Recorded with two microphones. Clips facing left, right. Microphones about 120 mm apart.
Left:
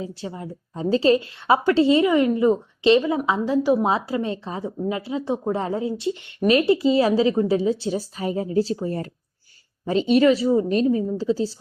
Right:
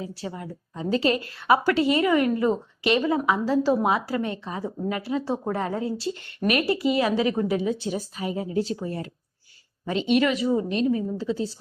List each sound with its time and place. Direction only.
0.0 s a woman's voice: 25° left (ahead or behind)
3.8 s a woman's voice: 25° left (ahead or behind)